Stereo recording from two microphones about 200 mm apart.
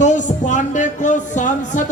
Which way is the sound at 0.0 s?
40° left (ahead or behind).